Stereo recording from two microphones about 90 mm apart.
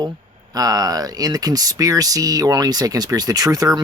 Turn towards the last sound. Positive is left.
turn(degrees=-45)  # may be behind; listen again after turning